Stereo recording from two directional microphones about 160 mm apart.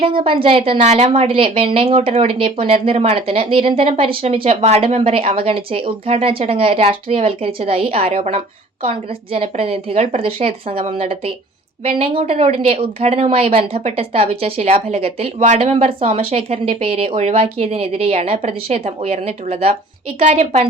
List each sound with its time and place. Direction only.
0.0 s a woman's voice: 35° right (ahead or behind)